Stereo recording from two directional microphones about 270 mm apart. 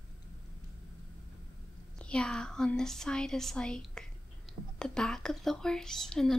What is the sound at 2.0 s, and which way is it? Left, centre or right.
Speech, centre.